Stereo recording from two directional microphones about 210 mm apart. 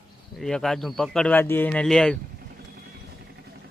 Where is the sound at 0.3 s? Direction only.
Centre (ahead or behind).